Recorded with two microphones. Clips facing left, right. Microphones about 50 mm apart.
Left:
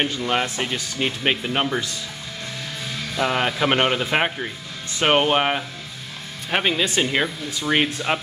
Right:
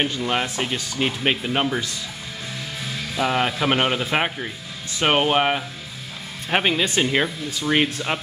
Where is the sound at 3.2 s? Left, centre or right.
Centre.